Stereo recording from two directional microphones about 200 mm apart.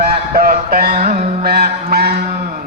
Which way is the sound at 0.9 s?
35° right (ahead or behind).